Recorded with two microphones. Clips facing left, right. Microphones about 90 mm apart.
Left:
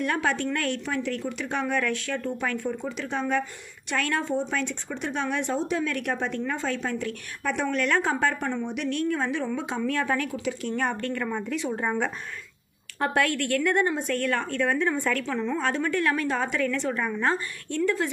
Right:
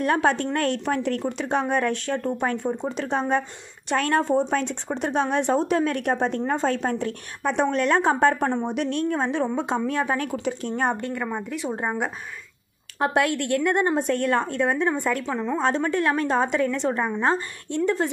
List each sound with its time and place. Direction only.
0.0 s a woman's voice: 35° right (ahead or behind)
10.2 s speech: 35° right (ahead or behind)
10.7 s speech: 25° right (ahead or behind)
11.4 s speech: 5° right (ahead or behind)
11.7 s a woman's voice: 15° right (ahead or behind)
15.6 s a woman's voice: 30° right (ahead or behind)